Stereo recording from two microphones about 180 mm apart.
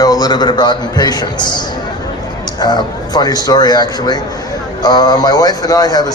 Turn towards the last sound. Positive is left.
turn(degrees=20)  # may be behind; listen again after turning